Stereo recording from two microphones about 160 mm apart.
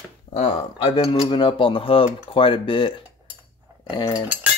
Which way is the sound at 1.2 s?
30° left (ahead or behind).